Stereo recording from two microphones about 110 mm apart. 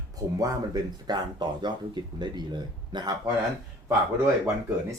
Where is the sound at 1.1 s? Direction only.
40° right (ahead or behind).